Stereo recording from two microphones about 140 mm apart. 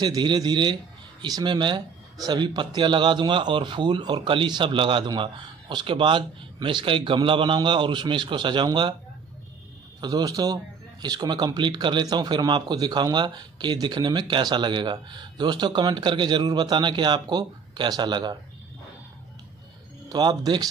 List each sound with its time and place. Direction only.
0.0 s a man's voice: 30° right (ahead or behind)
9.9 s a man's voice: 25° right (ahead or behind)
20.1 s a man's voice: 30° right (ahead or behind)